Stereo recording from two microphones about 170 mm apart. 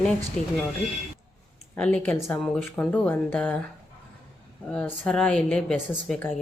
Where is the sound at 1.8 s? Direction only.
5° left (ahead or behind).